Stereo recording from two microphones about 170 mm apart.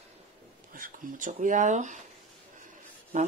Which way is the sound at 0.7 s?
50° right (ahead or behind).